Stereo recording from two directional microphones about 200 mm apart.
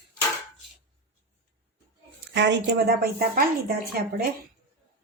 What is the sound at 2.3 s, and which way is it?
Speech, 60° right (ahead or behind).